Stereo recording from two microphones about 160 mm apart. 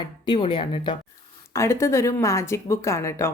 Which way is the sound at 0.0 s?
30° left (ahead or behind).